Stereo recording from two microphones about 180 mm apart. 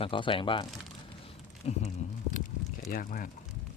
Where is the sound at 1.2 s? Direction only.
35° left (ahead or behind).